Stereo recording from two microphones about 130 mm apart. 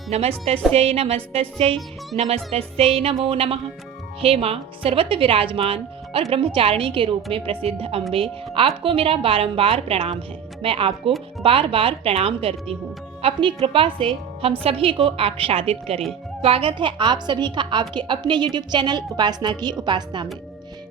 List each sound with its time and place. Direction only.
0.1 s a woman's voice: 50° right (ahead or behind); by 20.2 s 35° right (ahead or behind)